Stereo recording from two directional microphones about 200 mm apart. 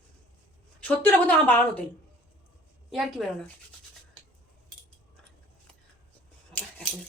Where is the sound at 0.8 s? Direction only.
5° left (ahead or behind).